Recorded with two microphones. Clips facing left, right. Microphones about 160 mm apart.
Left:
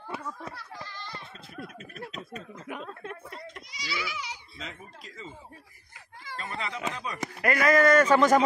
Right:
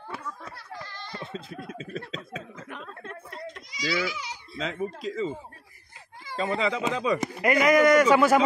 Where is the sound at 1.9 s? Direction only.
10° left (ahead or behind).